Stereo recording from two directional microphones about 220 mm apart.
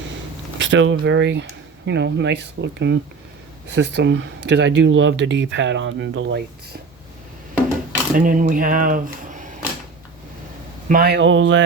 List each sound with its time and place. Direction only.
0.6 s speech: 60° right (ahead or behind)
8.1 s speech: 35° right (ahead or behind)
10.8 s speech: 45° right (ahead or behind); by 11.6 s 60° right (ahead or behind)